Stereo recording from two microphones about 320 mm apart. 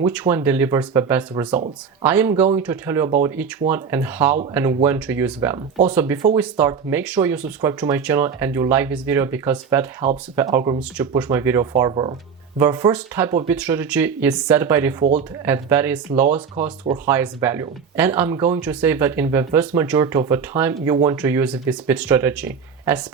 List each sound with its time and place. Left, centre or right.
0.0 s speech: centre
1.5 s speech: right
2.0 s speech: centre